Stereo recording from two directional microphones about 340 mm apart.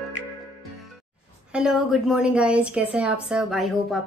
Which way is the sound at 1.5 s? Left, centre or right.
Centre.